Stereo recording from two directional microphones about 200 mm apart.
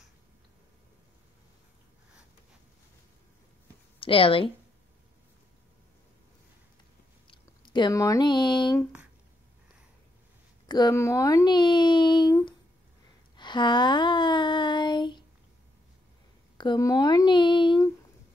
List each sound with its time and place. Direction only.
4.0 s speech: 25° left (ahead or behind)
7.2 s speech: 25° left (ahead or behind)
10.7 s speech: 20° left (ahead or behind)
13.4 s a sound: 20° left (ahead or behind)
16.5 s speech: 20° left (ahead or behind)